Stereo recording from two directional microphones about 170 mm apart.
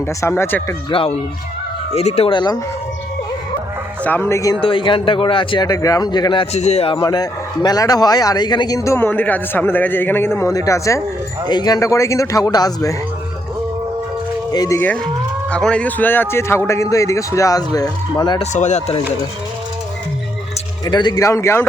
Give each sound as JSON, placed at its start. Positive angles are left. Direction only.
{"t": 0.0, "sound": "a man's voice", "side_deg": 15}
{"t": 0.9, "sound": "speech", "side_deg": 30}
{"t": 4.0, "sound": "a man's voice", "side_deg": 15}
{"t": 4.6, "sound": "speech", "side_deg": 30}
{"t": 6.9, "sound": "a man's voice", "side_deg": 25}
{"t": 14.5, "sound": "a man's voice", "side_deg": 20}
{"t": 18.3, "sound": "speech", "side_deg": 45}
{"t": 20.8, "sound": "a man's voice", "side_deg": 25}